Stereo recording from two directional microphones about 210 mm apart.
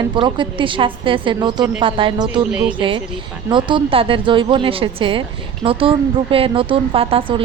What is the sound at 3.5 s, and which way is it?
A woman's voice, 25° right (ahead or behind).